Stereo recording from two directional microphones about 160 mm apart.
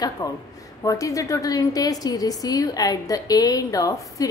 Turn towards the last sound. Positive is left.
turn(degrees=20)  # may be behind; listen again after turning